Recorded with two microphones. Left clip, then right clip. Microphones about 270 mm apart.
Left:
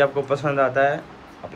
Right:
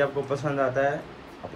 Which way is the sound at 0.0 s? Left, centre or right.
Centre.